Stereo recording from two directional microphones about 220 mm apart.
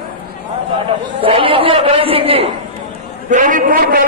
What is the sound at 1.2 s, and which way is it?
A man's voice, 25° right (ahead or behind).